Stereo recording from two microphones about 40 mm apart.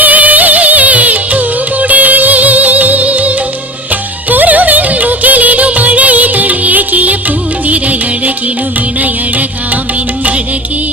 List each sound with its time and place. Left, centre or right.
0.0 s music: right